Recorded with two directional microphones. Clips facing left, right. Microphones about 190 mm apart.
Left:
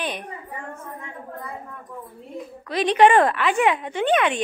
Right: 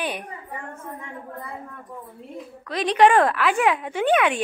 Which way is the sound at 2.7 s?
Centre (ahead or behind).